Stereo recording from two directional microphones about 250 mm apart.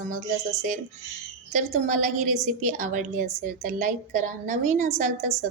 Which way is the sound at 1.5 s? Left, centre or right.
Right.